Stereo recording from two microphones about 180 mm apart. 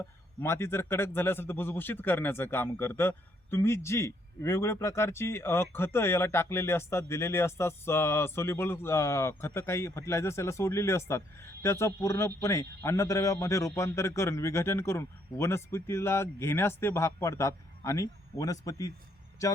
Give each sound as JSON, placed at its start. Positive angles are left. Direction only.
{"t": 0.4, "sound": "speech", "side_deg": 15}